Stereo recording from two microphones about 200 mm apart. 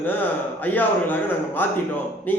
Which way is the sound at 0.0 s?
10° left (ahead or behind).